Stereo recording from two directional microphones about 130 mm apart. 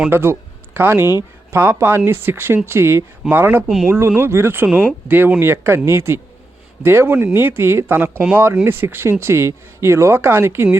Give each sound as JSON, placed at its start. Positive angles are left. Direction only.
{"t": 0.1, "sound": "speech", "side_deg": -20}